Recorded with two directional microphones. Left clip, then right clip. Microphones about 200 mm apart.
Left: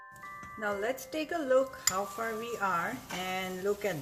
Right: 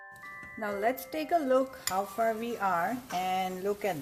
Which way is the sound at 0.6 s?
30° right (ahead or behind).